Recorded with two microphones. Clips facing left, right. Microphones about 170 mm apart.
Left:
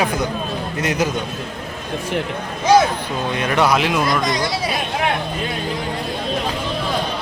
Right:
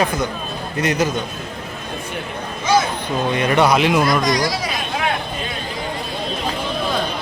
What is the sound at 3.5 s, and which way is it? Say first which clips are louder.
Speech: right 2 dB; centre (ahead or behind).